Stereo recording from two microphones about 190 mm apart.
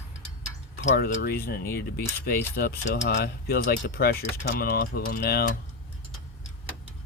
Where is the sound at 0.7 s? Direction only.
50° left (ahead or behind).